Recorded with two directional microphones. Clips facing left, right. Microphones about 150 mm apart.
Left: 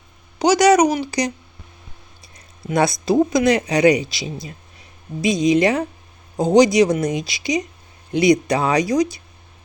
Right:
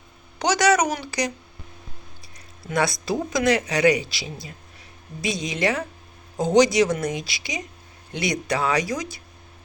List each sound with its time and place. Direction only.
0.3 s speech: 10° left (ahead or behind)
2.6 s speech: 20° left (ahead or behind)